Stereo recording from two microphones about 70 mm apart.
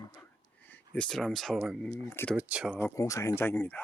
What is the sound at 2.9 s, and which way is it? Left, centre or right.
Speech, left.